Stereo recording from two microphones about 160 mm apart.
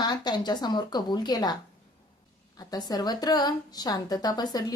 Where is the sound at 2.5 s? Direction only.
25° left (ahead or behind).